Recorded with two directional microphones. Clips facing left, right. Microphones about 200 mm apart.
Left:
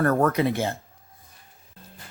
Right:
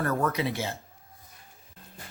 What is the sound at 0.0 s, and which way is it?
Speech, 50° left (ahead or behind).